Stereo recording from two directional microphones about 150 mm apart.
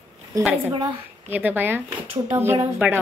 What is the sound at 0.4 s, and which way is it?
A woman's voice, 10° right (ahead or behind).